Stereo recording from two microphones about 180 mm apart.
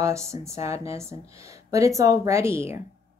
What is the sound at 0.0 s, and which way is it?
Speech, 15° right (ahead or behind).